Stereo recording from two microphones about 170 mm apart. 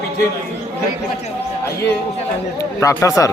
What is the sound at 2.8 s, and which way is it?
Speech, 20° left (ahead or behind).